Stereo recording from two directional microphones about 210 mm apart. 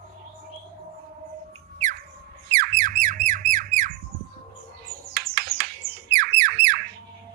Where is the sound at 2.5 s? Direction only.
50° right (ahead or behind).